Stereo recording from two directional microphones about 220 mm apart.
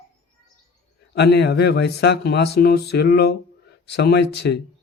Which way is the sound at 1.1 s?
50° left (ahead or behind).